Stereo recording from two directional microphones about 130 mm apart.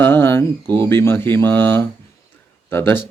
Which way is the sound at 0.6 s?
30° right (ahead or behind).